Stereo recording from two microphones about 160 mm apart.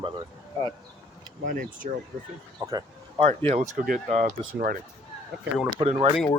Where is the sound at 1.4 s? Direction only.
55° right (ahead or behind).